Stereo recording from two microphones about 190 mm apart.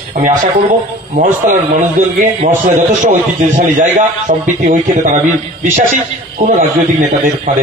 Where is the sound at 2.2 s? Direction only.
40° right (ahead or behind).